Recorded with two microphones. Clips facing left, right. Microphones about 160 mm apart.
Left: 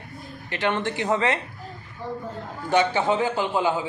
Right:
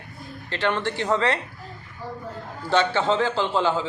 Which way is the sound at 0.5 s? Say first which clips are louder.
Even; 20° left (ahead or behind).